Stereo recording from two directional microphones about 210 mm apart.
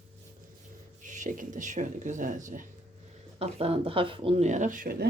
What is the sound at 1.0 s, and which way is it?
Speech, 35° right (ahead or behind).